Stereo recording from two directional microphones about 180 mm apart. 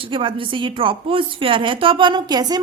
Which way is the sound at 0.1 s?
30° right (ahead or behind).